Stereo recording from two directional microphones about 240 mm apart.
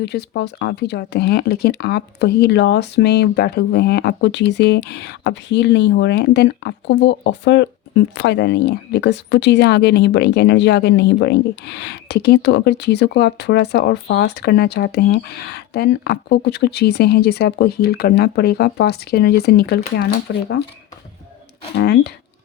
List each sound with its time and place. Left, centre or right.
0.0 s speech: left
21.8 s speech: left